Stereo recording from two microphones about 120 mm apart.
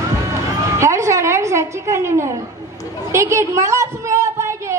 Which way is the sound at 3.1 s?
25° right (ahead or behind).